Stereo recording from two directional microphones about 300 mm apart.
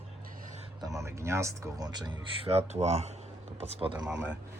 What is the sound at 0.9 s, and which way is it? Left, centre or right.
Speech, centre.